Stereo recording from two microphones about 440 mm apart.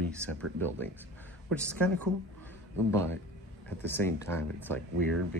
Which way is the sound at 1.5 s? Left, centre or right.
Centre.